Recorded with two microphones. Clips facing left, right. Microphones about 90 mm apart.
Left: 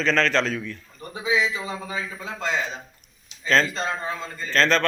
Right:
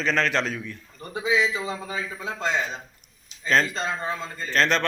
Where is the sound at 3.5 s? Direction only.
15° right (ahead or behind).